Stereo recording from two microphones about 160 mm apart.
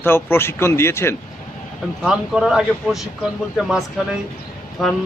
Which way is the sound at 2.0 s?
5° right (ahead or behind).